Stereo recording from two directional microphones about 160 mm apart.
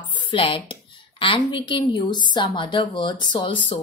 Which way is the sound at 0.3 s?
35° left (ahead or behind).